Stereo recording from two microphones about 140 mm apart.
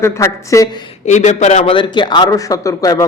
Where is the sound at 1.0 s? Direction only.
55° left (ahead or behind).